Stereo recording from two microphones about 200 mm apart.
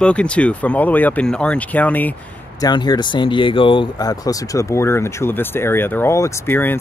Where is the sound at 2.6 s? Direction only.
20° left (ahead or behind).